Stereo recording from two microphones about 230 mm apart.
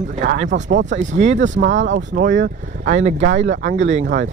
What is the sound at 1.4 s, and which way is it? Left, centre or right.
Speech, right.